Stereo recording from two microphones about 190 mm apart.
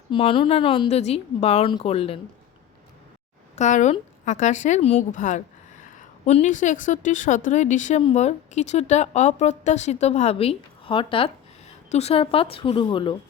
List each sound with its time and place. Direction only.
0.1 s speech: 30° left (ahead or behind)
3.5 s a woman's voice: 40° left (ahead or behind)